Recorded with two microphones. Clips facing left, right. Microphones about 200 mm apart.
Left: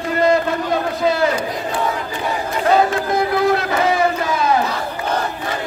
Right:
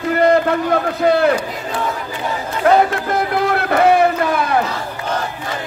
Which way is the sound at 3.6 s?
60° right (ahead or behind).